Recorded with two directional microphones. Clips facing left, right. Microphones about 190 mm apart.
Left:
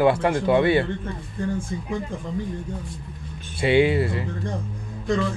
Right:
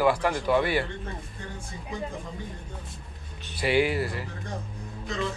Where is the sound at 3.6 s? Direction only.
25° left (ahead or behind).